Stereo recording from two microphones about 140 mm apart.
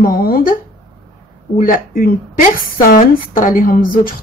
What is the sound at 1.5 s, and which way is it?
Speech, 80° left.